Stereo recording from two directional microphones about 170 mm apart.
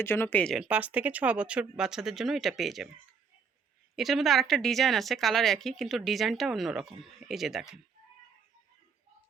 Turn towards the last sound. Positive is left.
turn(degrees=0)  # may be behind; listen again after turning